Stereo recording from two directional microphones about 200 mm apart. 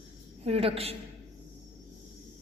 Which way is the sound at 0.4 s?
30° right (ahead or behind).